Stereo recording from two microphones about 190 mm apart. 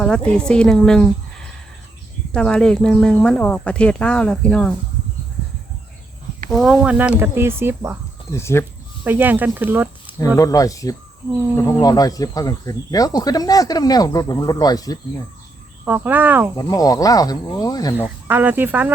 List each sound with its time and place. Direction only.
0.0 s speech: 5° left (ahead or behind)
6.5 s speech: centre (ahead or behind)
8.3 s speech: 15° left (ahead or behind)
9.0 s speech: 10° right (ahead or behind)
10.2 s speech: 15° left (ahead or behind)
15.8 s speech: 10° right (ahead or behind)
16.6 s speech: 20° left (ahead or behind)
17.9 s speech: 10° right (ahead or behind)